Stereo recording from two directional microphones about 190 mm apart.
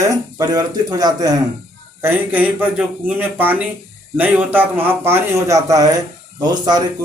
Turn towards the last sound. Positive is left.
turn(degrees=-20)  # may be behind; listen again after turning